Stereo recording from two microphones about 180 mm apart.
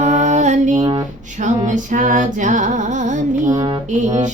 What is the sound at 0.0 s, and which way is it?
Music, 40° right (ahead or behind).